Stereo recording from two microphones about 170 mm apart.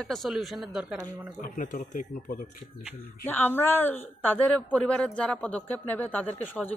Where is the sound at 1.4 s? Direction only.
50° left (ahead or behind).